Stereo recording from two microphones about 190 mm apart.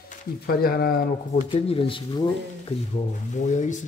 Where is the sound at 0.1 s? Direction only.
50° left (ahead or behind).